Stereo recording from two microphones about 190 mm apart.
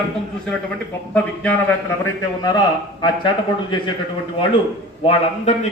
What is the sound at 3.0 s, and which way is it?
Speech, 25° left (ahead or behind).